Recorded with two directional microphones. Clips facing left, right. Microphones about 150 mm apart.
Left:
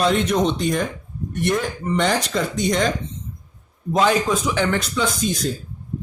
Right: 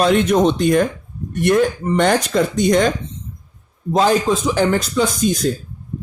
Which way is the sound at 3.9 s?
35° right (ahead or behind).